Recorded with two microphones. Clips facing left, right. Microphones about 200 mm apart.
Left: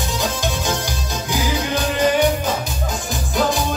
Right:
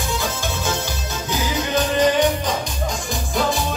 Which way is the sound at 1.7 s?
10° left (ahead or behind).